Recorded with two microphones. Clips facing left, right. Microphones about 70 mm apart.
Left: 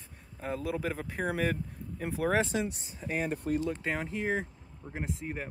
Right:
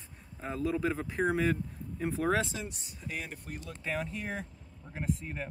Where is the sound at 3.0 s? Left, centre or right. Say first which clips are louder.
Left 8 dB; left; by 5.4 s centre.